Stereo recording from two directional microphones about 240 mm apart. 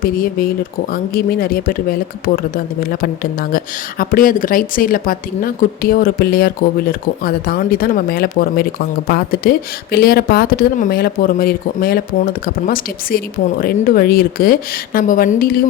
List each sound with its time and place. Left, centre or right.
0.0 s speech: left